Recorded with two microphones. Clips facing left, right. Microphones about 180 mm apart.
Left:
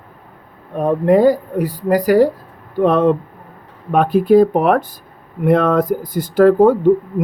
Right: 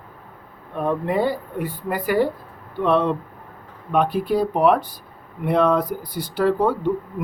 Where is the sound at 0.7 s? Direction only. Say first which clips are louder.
Left 9 dB; 40° left (ahead or behind).